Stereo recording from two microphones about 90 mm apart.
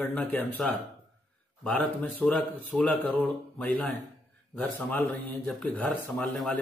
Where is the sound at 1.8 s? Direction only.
20° left (ahead or behind).